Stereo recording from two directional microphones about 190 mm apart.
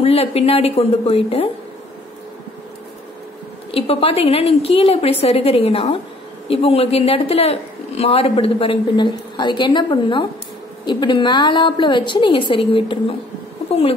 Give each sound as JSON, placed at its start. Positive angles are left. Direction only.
{"t": 0.0, "sound": "a woman's voice", "side_deg": 30}
{"t": 3.7, "sound": "a woman's voice", "side_deg": 30}